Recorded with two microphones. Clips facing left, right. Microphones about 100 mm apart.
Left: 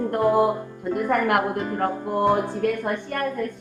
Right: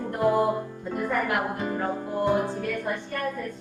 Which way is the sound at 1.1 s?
60° left (ahead or behind).